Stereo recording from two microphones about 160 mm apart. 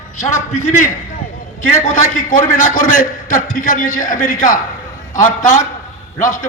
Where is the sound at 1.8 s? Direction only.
55° left (ahead or behind).